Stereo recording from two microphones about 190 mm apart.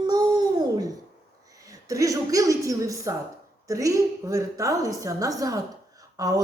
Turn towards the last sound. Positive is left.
turn(degrees=-20)  # may be behind; listen again after turning